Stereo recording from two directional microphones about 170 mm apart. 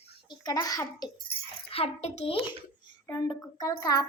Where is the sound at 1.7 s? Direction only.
35° left (ahead or behind).